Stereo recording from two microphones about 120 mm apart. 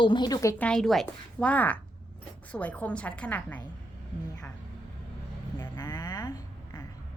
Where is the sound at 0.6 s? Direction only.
5° left (ahead or behind).